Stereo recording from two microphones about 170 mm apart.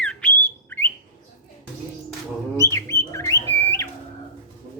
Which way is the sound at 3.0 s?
15° left (ahead or behind).